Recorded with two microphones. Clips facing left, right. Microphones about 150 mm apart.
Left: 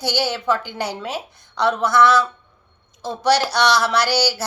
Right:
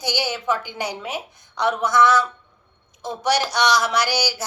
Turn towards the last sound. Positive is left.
turn(degrees=-15)  # may be behind; listen again after turning